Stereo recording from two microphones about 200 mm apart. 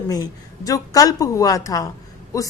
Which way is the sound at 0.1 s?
15° left (ahead or behind).